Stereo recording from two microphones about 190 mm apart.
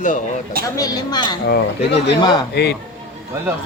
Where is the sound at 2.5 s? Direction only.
60° left (ahead or behind).